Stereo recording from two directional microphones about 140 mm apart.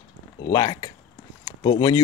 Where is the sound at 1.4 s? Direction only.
35° left (ahead or behind).